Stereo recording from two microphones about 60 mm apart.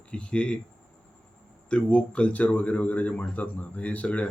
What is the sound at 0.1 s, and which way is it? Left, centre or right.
Speech, centre.